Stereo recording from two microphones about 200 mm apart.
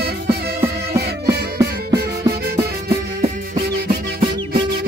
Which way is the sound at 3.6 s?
55° right (ahead or behind).